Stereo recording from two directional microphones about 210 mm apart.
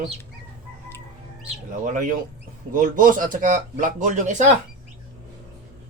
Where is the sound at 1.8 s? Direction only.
40° right (ahead or behind).